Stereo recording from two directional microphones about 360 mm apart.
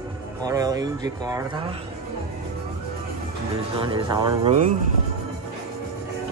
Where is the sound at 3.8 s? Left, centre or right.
Centre.